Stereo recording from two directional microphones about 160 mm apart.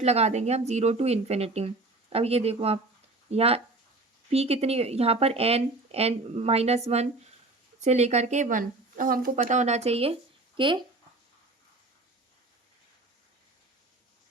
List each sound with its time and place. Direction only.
0.0 s speech: 40° right (ahead or behind); by 9.4 s 60° right (ahead or behind)
9.4 s speech: 45° right (ahead or behind); by 10.8 s 30° right (ahead or behind)